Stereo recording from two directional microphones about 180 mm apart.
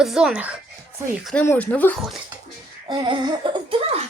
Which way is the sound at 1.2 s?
5° left (ahead or behind).